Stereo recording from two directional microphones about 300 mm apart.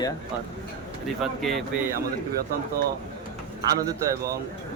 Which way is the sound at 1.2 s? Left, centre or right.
Centre.